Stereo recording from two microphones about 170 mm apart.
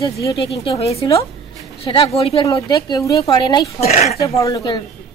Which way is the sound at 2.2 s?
35° left (ahead or behind).